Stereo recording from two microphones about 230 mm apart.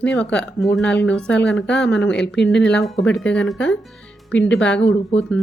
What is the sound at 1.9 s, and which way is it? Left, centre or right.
Speech, left.